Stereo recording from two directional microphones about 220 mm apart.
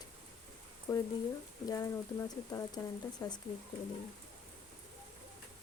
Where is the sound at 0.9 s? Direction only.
15° left (ahead or behind).